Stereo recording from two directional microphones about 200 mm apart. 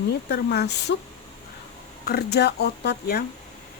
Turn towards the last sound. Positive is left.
turn(degrees=55)  # may be behind; listen again after turning